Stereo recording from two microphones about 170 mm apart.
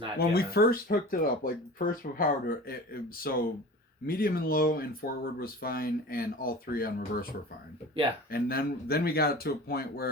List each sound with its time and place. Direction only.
0.2 s speech: 65° left (ahead or behind)
8.3 s speech: 65° left (ahead or behind)